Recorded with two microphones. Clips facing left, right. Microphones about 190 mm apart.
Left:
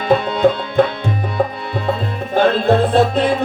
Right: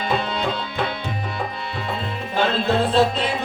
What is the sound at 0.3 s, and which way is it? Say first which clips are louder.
Music: left 10 dB; 55° left (ahead or behind).